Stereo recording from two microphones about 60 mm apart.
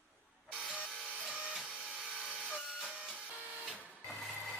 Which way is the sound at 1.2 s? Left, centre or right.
Centre.